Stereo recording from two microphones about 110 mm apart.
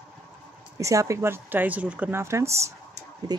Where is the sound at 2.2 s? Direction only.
25° right (ahead or behind).